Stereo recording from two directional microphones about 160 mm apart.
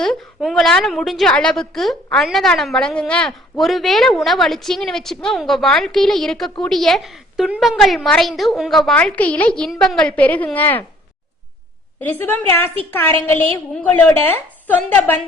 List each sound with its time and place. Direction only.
0.0 s a woman's voice: centre (ahead or behind)
11.9 s a woman's voice: 10° left (ahead or behind)